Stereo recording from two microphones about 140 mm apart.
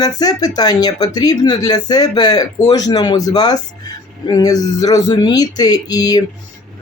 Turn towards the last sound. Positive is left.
turn(degrees=25)  # may be behind; listen again after turning